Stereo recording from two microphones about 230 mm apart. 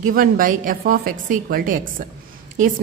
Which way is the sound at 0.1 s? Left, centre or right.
Right.